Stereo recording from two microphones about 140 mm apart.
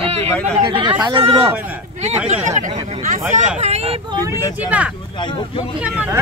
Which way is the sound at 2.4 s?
65° right (ahead or behind).